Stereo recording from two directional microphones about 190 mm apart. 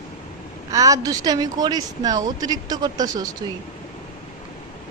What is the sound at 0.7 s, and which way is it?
Speech, 15° right (ahead or behind).